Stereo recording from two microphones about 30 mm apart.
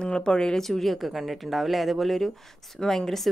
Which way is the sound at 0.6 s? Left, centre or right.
Centre.